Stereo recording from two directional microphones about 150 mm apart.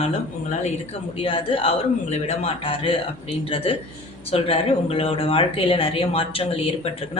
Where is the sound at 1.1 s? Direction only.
35° left (ahead or behind).